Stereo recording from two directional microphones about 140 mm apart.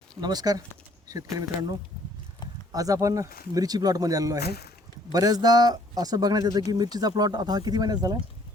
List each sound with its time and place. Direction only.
0.2 s a man's voice: 30° right (ahead or behind)
2.7 s a man's voice: 25° right (ahead or behind)